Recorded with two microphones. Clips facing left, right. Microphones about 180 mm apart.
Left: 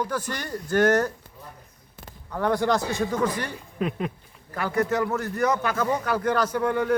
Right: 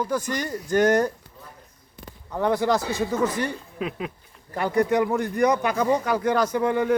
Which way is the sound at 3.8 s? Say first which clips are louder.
Left 3 dB; centre (ahead or behind).